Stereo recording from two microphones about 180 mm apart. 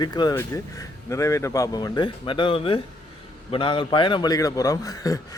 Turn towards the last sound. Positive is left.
turn(degrees=20)  # may be behind; listen again after turning